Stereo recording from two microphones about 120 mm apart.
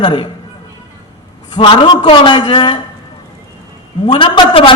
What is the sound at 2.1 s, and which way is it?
Speech, 40° left (ahead or behind).